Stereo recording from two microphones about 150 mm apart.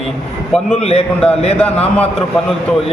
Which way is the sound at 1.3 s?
40° left (ahead or behind).